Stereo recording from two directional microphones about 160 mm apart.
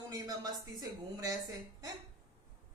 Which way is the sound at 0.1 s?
25° right (ahead or behind).